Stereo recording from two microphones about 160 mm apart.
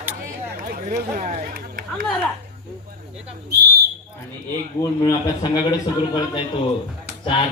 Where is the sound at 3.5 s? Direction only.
85° right.